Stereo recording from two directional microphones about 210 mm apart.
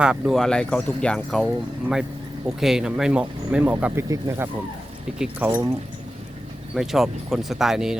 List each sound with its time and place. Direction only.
0.0 s speech: centre (ahead or behind)
6.7 s speech: centre (ahead or behind)